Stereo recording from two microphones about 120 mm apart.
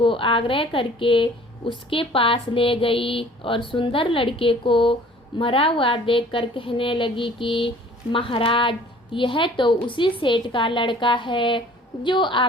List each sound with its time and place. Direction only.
0.0 s a woman's voice: 45° left (ahead or behind)